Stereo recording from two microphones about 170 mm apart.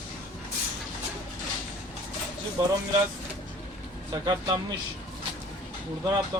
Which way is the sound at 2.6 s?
25° right (ahead or behind).